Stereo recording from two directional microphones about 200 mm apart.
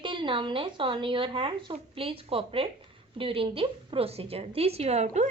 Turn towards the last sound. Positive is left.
turn(degrees=-35)  # may be behind; listen again after turning